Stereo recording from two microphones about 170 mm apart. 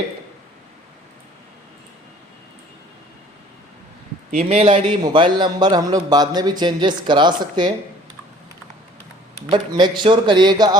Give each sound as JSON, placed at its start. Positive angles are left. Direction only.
{"t": 4.4, "sound": "a man's voice", "side_deg": -35}
{"t": 5.0, "sound": "a man's voice", "side_deg": -25}
{"t": 9.5, "sound": "a man's voice", "side_deg": -25}